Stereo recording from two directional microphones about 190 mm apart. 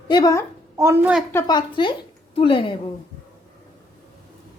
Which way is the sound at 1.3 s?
15° left (ahead or behind).